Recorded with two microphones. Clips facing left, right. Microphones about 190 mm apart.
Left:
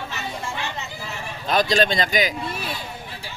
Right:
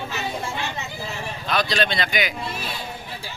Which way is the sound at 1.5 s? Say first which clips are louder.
Left 4 dB; 45° left (ahead or behind).